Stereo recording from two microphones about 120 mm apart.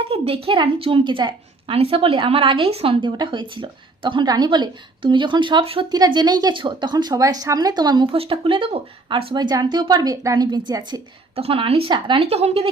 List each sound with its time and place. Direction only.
0.1 s a woman's voice: 50° right (ahead or behind)
5.9 s speech: 35° right (ahead or behind)
9.4 s speech: 35° right (ahead or behind)
11.3 s a woman's voice: 50° right (ahead or behind)